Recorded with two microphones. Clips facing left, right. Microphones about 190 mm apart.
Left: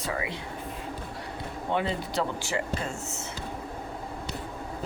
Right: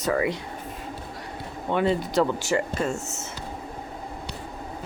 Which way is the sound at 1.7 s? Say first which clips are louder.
Right 7 dB; 45° right (ahead or behind).